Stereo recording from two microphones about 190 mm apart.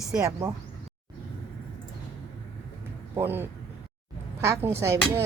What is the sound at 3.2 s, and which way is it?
Speech, 10° right (ahead or behind).